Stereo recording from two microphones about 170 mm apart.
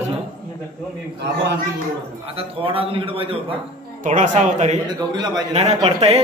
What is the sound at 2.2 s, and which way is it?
Speech, 35° right (ahead or behind).